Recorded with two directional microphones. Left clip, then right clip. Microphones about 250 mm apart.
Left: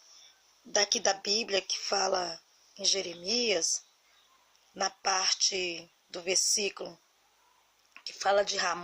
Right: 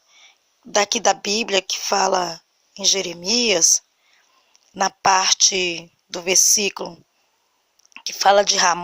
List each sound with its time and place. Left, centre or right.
0.2 s a sound: right
1.4 s a woman's voice: right
7.9 s a woman's voice: right